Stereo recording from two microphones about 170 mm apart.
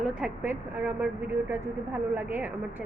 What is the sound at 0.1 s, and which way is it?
A woman's voice, 10° right (ahead or behind).